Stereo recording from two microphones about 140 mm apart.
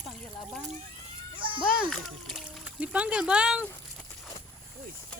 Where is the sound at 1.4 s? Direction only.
35° right (ahead or behind).